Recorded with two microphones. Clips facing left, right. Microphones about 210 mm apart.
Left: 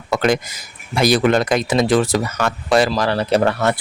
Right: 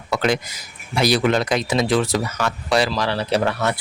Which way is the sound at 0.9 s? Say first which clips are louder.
Left 3 dB; 50° left (ahead or behind).